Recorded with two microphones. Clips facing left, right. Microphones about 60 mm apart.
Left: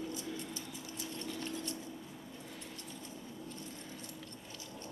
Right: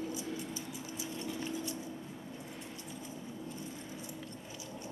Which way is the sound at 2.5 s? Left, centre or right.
Centre.